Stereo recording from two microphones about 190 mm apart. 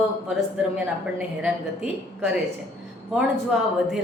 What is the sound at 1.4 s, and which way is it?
Speech, 5° right (ahead or behind).